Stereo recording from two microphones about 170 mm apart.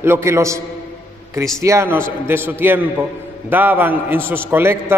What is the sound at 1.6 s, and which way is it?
A man's voice, 15° right (ahead or behind).